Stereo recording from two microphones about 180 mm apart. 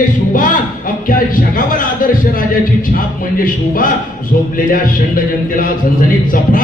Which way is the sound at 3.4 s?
50° left (ahead or behind).